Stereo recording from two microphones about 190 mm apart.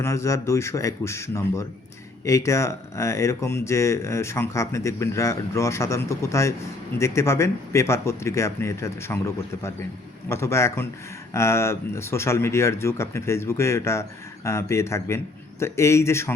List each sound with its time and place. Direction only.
0.0 s speech: 15° left (ahead or behind)